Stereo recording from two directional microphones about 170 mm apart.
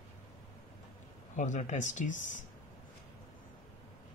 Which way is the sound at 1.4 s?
45° left (ahead or behind).